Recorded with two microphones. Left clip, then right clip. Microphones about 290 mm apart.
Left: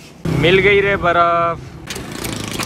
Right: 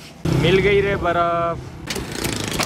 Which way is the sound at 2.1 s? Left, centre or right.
Left.